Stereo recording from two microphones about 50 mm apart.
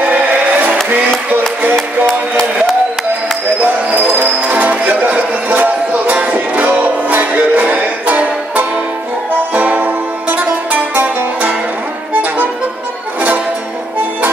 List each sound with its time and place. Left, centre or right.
0.0 s music: right
1.8 s music: centre
4.2 s music: right